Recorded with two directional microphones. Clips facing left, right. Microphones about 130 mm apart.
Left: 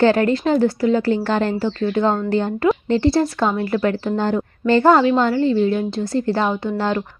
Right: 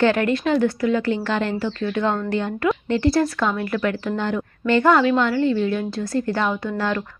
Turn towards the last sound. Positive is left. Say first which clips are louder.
# left 3 dB
turn(degrees=25)  # may be behind; listen again after turning